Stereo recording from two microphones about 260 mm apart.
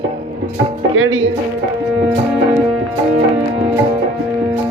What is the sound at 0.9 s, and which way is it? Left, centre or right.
Speech, right.